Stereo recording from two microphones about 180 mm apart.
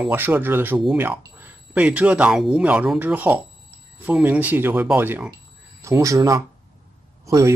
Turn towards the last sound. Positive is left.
turn(degrees=-15)  # may be behind; listen again after turning